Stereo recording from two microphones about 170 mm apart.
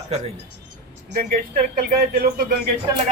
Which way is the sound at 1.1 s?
55° right (ahead or behind).